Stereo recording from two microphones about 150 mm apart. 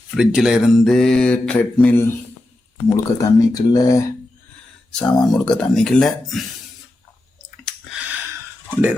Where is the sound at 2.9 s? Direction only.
25° left (ahead or behind).